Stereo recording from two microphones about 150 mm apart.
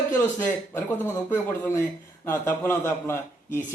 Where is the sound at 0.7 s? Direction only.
15° left (ahead or behind).